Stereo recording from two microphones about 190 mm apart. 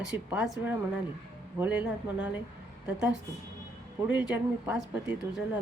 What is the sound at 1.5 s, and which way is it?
Speech, 5° right (ahead or behind).